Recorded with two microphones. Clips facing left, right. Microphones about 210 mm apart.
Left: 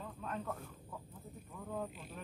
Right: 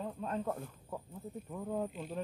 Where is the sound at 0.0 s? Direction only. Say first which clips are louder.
Right 6 dB; 35° right (ahead or behind).